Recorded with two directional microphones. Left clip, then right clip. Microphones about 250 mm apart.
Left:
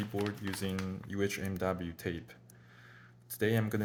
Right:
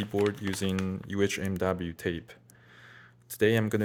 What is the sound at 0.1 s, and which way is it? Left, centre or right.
Speech, right.